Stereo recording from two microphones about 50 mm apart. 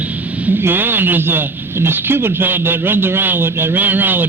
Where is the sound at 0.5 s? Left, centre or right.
Right.